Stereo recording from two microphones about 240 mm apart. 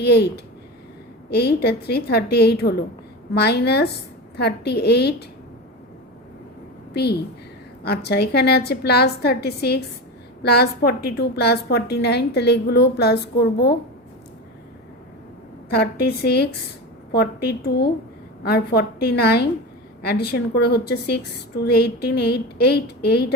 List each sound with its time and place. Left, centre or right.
0.0 s a woman's voice: left
6.9 s a woman's voice: left
15.7 s a woman's voice: left